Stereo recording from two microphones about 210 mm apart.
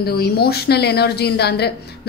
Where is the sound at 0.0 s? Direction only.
50° left (ahead or behind).